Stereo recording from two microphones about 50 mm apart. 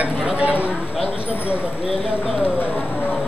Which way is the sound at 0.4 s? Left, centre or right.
Right.